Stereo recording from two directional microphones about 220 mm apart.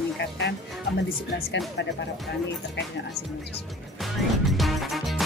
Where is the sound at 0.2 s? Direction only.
50° left (ahead or behind).